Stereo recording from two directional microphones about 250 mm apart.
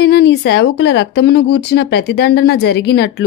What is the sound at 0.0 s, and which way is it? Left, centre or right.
Speech, left.